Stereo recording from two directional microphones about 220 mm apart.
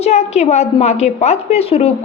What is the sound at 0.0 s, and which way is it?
A woman's voice, 30° left (ahead or behind).